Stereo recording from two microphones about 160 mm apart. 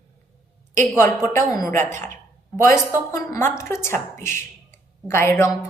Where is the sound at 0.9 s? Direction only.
20° left (ahead or behind).